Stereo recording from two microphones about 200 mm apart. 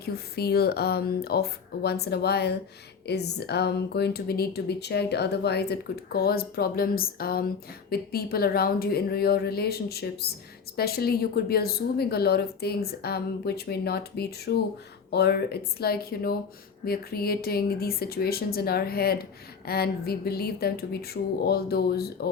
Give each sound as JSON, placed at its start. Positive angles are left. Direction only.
{"t": 0.0, "sound": "a woman's voice", "side_deg": 50}